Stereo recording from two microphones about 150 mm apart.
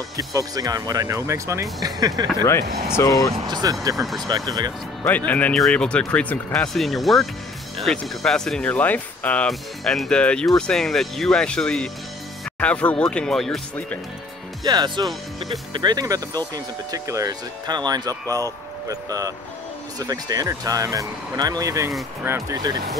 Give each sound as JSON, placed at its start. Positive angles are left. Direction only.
{"t": 0.2, "sound": "speech", "side_deg": -25}
{"t": 2.6, "sound": "speech", "side_deg": -90}
{"t": 3.0, "sound": "speech", "side_deg": 20}
{"t": 3.4, "sound": "speech", "side_deg": -30}
{"t": 3.9, "sound": "speech", "side_deg": 0}
{"t": 4.5, "sound": "speech", "side_deg": -25}
{"t": 5.0, "sound": "speech", "side_deg": 10}
{"t": 14.6, "sound": "speech", "side_deg": -30}